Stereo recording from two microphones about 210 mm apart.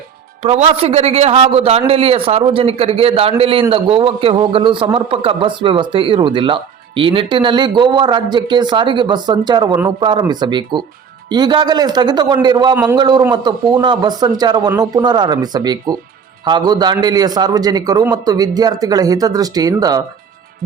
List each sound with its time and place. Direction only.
0.4 s a man's voice: 30° right (ahead or behind)
12.7 s a man's voice: 10° right (ahead or behind)
13.0 s a man's voice: 20° right (ahead or behind)